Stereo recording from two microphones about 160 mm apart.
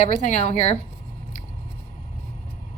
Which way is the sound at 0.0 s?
45° left (ahead or behind).